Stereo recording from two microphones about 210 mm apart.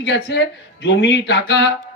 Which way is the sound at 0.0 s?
55° left (ahead or behind).